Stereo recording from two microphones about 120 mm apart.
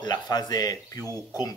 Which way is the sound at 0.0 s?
35° left (ahead or behind).